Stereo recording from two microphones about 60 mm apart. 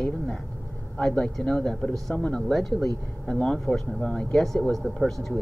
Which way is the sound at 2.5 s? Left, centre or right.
Centre.